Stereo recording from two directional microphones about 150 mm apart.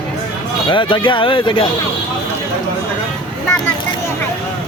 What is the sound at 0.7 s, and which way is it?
Speech, 35° left (ahead or behind).